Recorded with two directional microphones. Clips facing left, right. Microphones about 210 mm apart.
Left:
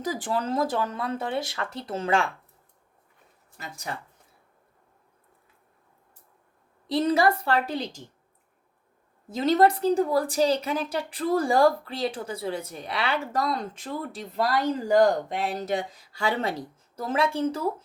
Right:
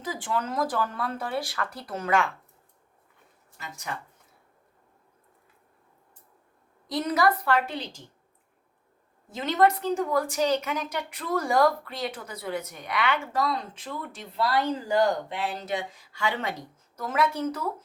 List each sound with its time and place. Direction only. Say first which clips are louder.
0.0 s speech: left 2 dB; 40° left (ahead or behind)
3.6 s speech: left 1 dB; 35° left (ahead or behind)
6.8 s speech: left 3 dB; 30° left (ahead or behind)
9.3 s speech: left 3 dB; 35° left (ahead or behind)